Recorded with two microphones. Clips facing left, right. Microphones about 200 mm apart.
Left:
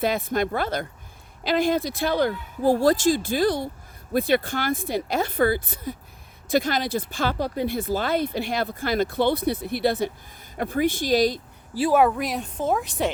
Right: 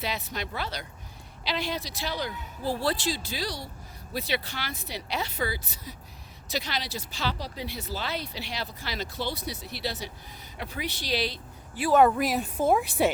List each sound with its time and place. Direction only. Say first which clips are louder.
0.0 s speech: left 10 dB; 50° left (ahead or behind)
11.9 s a woman's voice: even; 5° left (ahead or behind)